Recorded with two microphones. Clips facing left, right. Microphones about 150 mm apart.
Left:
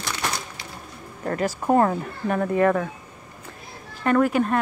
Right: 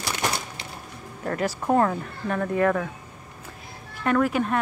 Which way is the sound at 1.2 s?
Centre (ahead or behind).